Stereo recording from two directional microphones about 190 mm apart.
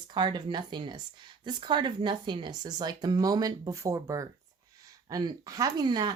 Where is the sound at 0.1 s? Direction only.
25° right (ahead or behind).